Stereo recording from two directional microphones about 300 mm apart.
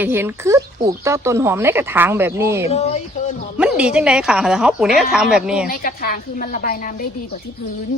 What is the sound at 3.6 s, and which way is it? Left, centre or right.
Speech, centre.